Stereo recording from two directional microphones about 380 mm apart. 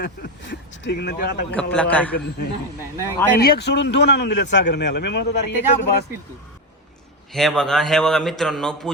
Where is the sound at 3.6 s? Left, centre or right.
Left.